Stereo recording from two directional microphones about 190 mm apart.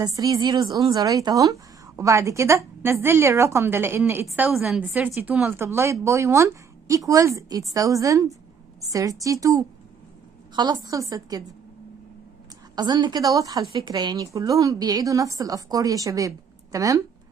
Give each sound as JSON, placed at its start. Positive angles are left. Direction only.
{"t": 0.0, "sound": "a woman's voice", "side_deg": -20}
{"t": 12.7, "sound": "a woman's voice", "side_deg": -20}